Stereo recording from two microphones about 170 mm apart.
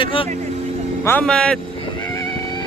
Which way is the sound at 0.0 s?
30° left (ahead or behind).